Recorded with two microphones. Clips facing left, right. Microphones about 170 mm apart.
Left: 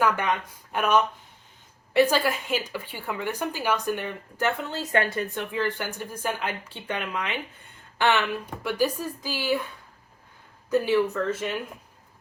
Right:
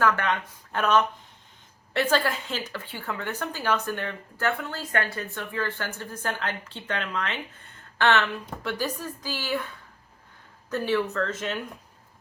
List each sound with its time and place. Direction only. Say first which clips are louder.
0.0 s speech: even; 15° left (ahead or behind)